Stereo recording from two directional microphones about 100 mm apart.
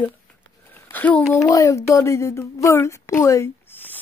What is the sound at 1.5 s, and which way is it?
A woman's voice, 35° left (ahead or behind).